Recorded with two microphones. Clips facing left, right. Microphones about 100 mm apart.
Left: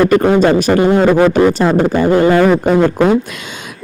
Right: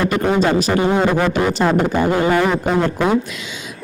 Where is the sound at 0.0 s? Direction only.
55° left (ahead or behind).